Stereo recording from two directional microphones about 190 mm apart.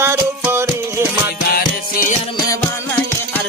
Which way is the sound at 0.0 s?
10° right (ahead or behind).